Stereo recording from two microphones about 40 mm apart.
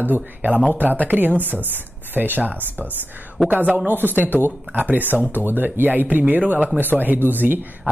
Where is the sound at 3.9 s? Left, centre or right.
Right.